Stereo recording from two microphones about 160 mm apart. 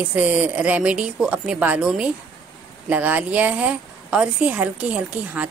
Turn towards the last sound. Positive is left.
turn(degrees=-10)  # may be behind; listen again after turning